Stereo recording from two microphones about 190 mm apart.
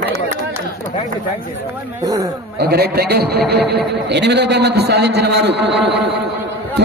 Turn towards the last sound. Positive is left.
turn(degrees=-65)  # may be behind; listen again after turning